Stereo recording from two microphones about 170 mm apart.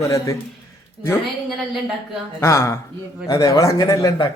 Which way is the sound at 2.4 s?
15° left (ahead or behind).